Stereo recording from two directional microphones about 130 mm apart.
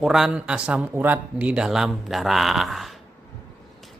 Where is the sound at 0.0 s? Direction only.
5° right (ahead or behind).